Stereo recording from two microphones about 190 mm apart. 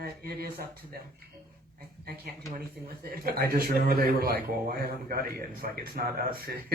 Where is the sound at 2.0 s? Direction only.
50° right (ahead or behind).